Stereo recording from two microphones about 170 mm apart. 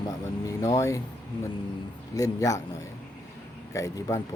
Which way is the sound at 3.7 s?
20° left (ahead or behind).